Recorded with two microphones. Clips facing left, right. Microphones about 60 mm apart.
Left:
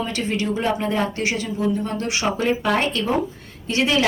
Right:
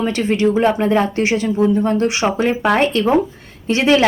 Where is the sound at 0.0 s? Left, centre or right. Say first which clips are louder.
Right 6 dB; right.